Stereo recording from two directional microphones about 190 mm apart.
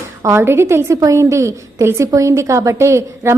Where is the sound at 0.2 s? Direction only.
15° right (ahead or behind).